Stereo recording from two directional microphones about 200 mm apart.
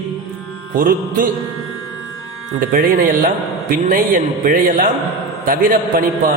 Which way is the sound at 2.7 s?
40° right (ahead or behind).